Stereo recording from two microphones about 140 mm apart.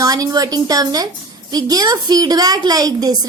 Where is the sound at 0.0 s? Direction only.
25° right (ahead or behind).